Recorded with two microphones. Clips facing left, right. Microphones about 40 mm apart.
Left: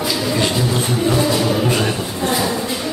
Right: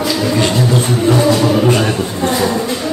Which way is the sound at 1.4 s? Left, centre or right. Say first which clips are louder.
Right 5 dB; centre.